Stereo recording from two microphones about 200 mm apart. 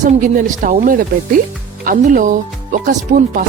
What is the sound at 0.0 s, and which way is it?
Speech, 40° right (ahead or behind).